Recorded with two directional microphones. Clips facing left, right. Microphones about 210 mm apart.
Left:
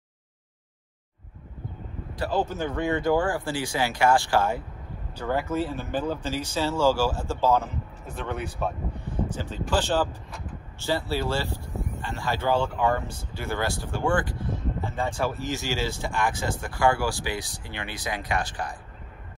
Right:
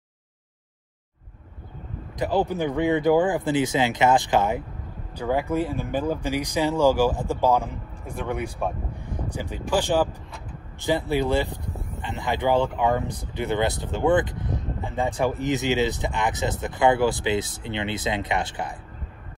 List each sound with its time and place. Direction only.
2.1 s speech: 15° right (ahead or behind)